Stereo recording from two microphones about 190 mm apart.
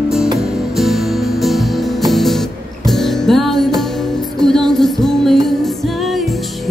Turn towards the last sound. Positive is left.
turn(degrees=0)  # may be behind; listen again after turning